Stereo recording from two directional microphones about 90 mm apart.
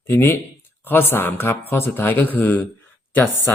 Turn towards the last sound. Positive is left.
turn(degrees=20)  # may be behind; listen again after turning